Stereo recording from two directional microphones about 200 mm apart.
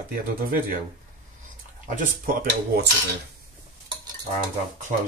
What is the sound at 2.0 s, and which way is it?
Speech, 50° right (ahead or behind).